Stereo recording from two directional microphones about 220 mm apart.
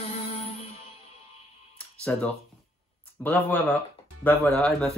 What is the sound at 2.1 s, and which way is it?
Speech, 5° left (ahead or behind).